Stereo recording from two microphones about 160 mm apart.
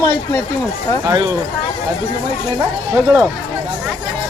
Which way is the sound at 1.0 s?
20° right (ahead or behind).